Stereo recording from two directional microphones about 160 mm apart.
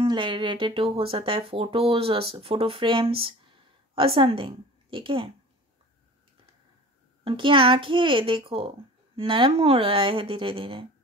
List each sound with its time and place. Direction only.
0.0 s a child's voice: 30° right (ahead or behind)
7.2 s a child's voice: 30° right (ahead or behind)